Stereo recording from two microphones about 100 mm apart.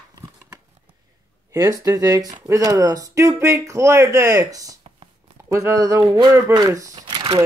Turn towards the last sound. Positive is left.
turn(degrees=-40)  # may be behind; listen again after turning